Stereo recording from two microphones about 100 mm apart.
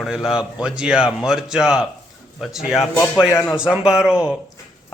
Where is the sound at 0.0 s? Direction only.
5° right (ahead or behind).